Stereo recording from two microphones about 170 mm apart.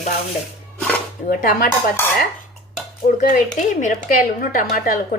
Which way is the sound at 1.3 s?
55° left (ahead or behind).